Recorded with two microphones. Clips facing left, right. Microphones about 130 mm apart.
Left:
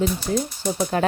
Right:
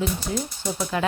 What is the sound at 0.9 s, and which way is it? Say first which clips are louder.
Speech: left 3 dB; 40° left (ahead or behind).